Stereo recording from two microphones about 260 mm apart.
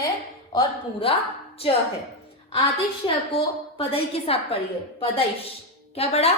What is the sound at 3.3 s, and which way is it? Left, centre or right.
A woman's voice, left.